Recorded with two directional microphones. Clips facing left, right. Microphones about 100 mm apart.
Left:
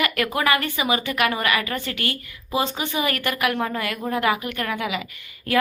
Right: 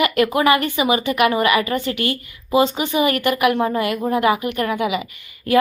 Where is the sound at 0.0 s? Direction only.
20° right (ahead or behind).